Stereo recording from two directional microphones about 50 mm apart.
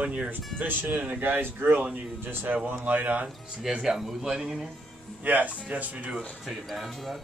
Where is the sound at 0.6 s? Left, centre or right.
Right.